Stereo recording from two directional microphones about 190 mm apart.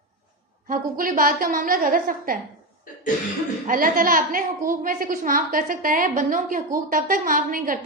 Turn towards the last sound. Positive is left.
turn(degrees=-45)  # may be behind; listen again after turning